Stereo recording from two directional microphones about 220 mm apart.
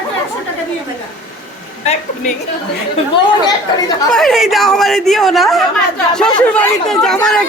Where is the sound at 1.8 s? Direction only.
30° left (ahead or behind).